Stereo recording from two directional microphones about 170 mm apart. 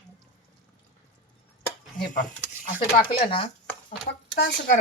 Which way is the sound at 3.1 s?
30° left (ahead or behind).